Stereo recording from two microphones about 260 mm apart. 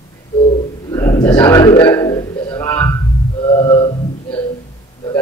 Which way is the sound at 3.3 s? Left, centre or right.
Centre.